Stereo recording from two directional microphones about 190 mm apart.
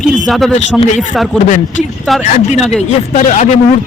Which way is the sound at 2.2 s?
35° left (ahead or behind).